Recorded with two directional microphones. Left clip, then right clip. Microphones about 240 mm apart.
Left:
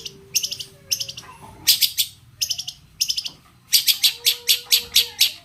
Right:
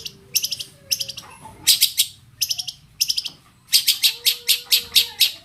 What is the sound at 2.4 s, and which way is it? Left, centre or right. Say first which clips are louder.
Bird: right 1 dB; centre.